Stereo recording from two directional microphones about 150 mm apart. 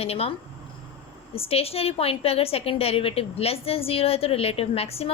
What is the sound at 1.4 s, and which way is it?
A woman's voice, 40° left (ahead or behind).